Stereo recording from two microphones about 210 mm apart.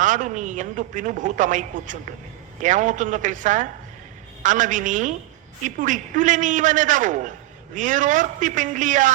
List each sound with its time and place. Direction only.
0.0 s a man's voice: 35° right (ahead or behind)